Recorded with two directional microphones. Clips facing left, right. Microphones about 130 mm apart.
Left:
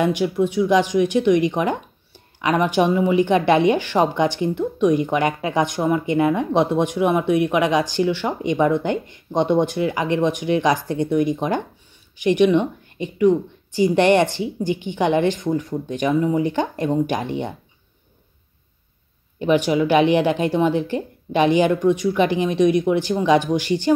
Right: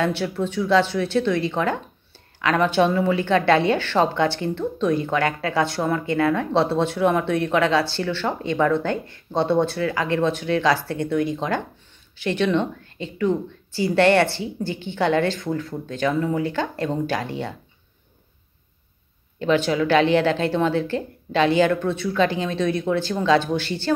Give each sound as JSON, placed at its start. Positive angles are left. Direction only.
{"t": 0.0, "sound": "speech", "side_deg": 15}
{"t": 19.4, "sound": "speech", "side_deg": 15}